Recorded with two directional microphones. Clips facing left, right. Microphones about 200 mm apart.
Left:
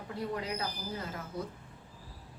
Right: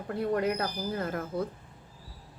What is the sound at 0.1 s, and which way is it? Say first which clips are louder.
Speech: right 8 dB; 55° right (ahead or behind).